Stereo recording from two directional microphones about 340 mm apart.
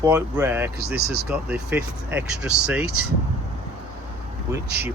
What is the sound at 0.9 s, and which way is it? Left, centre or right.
Speech, right.